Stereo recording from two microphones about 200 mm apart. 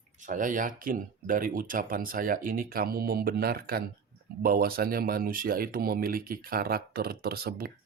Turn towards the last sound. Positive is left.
turn(degrees=-50)  # may be behind; listen again after turning